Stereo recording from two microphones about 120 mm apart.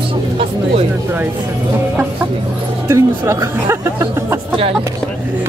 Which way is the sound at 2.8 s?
25° right (ahead or behind).